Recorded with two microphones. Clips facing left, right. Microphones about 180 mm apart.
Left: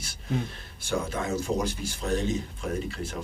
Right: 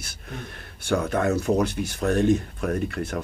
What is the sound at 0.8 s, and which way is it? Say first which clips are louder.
Speech: right 7 dB; 65° right (ahead or behind).